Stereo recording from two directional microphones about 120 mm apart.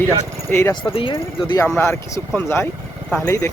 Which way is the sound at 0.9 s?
45° left (ahead or behind).